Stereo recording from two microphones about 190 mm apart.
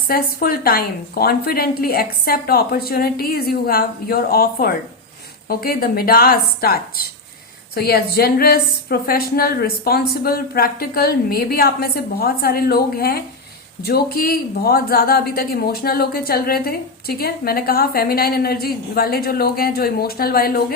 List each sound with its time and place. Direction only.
0.1 s speech: 50° left (ahead or behind)